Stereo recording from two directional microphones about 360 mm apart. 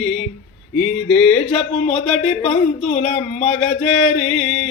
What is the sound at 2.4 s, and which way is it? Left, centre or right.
Speech, centre.